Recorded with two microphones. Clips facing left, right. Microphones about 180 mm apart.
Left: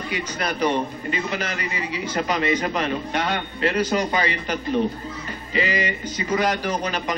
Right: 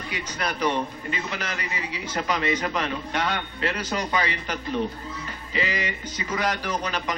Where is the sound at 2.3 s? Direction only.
5° left (ahead or behind).